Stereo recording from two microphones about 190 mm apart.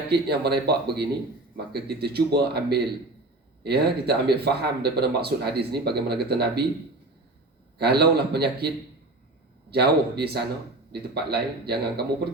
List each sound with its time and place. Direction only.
0.1 s speech: 60° right (ahead or behind)
7.8 s speech: 60° right (ahead or behind)